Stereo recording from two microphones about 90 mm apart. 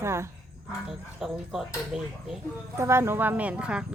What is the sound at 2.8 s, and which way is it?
Speech, 30° right (ahead or behind).